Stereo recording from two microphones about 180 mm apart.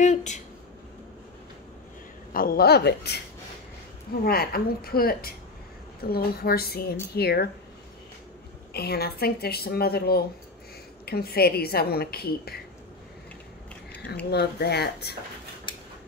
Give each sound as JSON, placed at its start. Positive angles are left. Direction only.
{"t": 0.0, "sound": "speech", "side_deg": 40}
{"t": 2.3, "sound": "a woman's voice", "side_deg": 55}
{"t": 4.2, "sound": "a woman's voice", "side_deg": 60}
{"t": 8.7, "sound": "a woman's voice", "side_deg": 60}
{"t": 14.3, "sound": "a woman's voice", "side_deg": 65}
{"t": 15.7, "sound": "a sound", "side_deg": 25}